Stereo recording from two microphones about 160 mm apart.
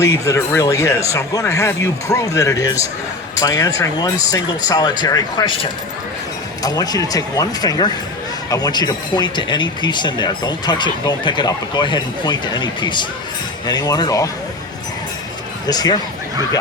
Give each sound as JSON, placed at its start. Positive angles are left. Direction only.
{"t": 0.0, "sound": "speech", "side_deg": 20}
{"t": 6.6, "sound": "speech", "side_deg": 25}
{"t": 15.6, "sound": "speech", "side_deg": 25}